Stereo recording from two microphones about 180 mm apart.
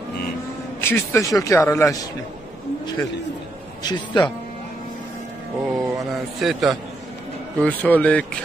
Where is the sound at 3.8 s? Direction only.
25° left (ahead or behind).